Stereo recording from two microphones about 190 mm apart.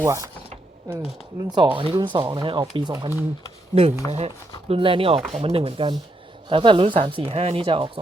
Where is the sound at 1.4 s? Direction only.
20° right (ahead or behind).